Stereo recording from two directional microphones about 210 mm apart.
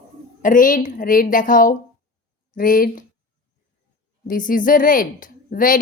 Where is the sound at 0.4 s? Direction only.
40° left (ahead or behind).